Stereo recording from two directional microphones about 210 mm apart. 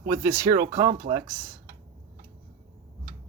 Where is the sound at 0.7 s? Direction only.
40° right (ahead or behind).